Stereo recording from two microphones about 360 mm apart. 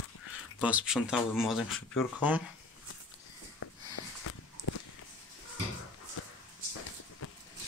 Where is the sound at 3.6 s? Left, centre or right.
Left.